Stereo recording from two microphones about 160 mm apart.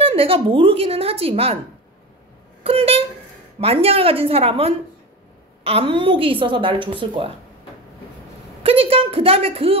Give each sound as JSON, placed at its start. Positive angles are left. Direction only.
{"t": 0.0, "sound": "a woman's voice", "side_deg": -35}
{"t": 2.6, "sound": "a woman's voice", "side_deg": -35}
{"t": 8.6, "sound": "a woman's voice", "side_deg": -35}